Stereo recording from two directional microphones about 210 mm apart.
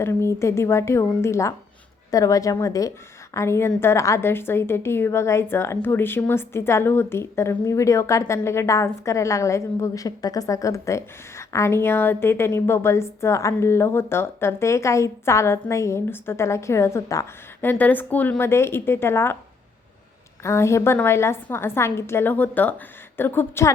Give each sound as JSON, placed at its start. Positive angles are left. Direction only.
{"t": 0.0, "sound": "a woman's voice", "side_deg": 10}
{"t": 20.4, "sound": "a woman's voice", "side_deg": 15}